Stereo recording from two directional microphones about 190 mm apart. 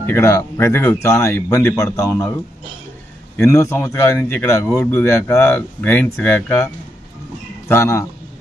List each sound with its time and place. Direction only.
0.0 s a man's voice: 15° left (ahead or behind)
3.3 s a man's voice: 15° left (ahead or behind)